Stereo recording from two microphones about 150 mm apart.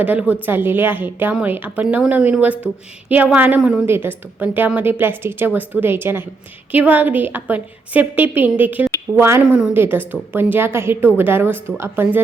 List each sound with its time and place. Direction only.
0.0 s a woman's voice: 10° right (ahead or behind)